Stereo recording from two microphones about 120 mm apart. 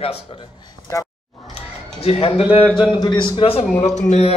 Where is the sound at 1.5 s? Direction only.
55° left (ahead or behind).